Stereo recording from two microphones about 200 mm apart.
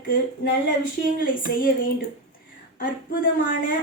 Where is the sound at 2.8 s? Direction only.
45° left (ahead or behind).